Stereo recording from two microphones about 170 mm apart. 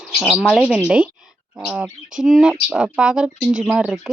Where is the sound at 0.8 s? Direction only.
5° right (ahead or behind).